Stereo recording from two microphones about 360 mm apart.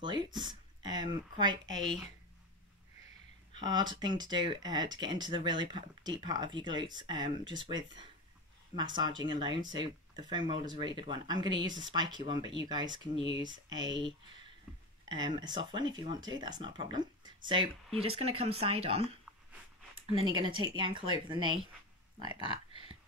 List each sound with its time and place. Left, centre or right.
0.0 s speech: centre
3.5 s speech: centre